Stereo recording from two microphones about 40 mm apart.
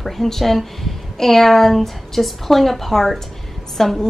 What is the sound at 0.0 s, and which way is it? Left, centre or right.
A woman's voice, centre.